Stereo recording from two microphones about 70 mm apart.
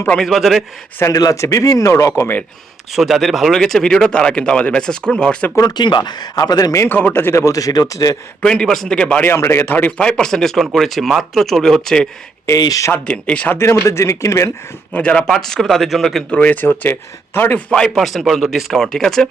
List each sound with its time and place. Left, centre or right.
0.2 s a man's voice: centre
1.1 s speech: left
2.9 s speech: centre
5.5 s speech: left
6.8 s speech: left
8.4 s speech: centre
9.2 s speech: left; by 12.0 s centre
12.5 s speech: left
12.9 s speech: centre
13.8 s speech: left
14.9 s a man's voice: centre
16.3 s speech: left
17.7 s a man's voice: centre